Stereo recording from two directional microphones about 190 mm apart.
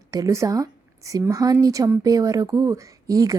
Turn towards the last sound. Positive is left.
turn(degrees=-20)  # may be behind; listen again after turning